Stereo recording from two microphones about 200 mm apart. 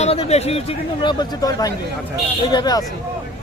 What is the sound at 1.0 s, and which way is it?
Speech, 20° left (ahead or behind).